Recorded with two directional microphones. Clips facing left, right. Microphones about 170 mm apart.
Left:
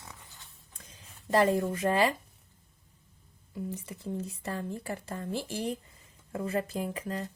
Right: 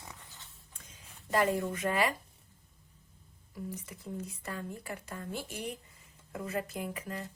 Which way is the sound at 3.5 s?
25° left (ahead or behind).